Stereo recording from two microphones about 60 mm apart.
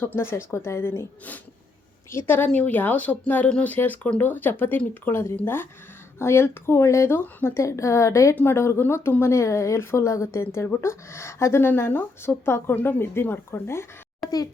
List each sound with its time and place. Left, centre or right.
0.2 s speech: left
2.0 s speech: left
2.5 s speech: left
5.0 s speech: left
7.5 s a woman's voice: left
8.4 s a woman's voice: left
10.4 s speech: left
11.6 s speech: left
14.2 s a child's voice: centre